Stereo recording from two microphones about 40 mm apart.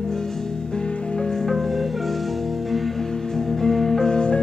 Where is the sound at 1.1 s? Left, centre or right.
Centre.